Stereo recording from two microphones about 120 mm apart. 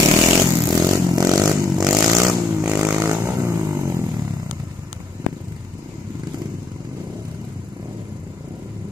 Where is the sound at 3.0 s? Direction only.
25° right (ahead or behind).